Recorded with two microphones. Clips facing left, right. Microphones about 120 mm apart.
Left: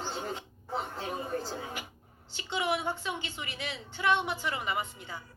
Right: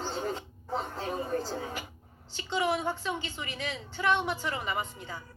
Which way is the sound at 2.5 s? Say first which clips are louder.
Right 2 dB; 45° right (ahead or behind).